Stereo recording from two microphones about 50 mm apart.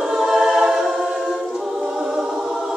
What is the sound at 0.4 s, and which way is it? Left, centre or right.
Choir, centre.